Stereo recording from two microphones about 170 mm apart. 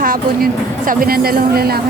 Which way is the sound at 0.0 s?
55° right (ahead or behind).